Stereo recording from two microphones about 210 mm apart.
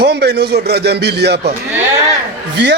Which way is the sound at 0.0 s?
50° right (ahead or behind).